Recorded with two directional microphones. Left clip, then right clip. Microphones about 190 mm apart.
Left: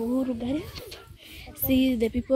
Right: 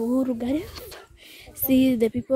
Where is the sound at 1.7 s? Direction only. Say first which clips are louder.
Right 4 dB; 25° right (ahead or behind).